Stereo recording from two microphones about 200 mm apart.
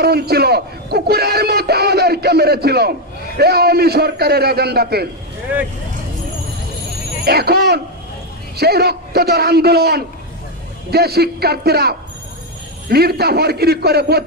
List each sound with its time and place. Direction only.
0.0 s speech: 50° right (ahead or behind)
7.2 s speech: 50° right (ahead or behind)